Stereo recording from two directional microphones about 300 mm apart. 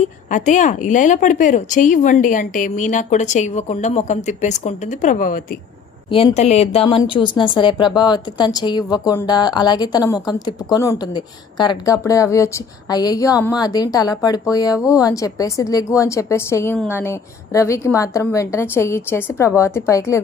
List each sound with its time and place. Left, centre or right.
0.0 s a woman's voice: left
6.1 s a woman's voice: centre